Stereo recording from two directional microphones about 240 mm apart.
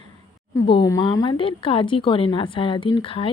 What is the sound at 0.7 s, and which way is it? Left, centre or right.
Speech, centre.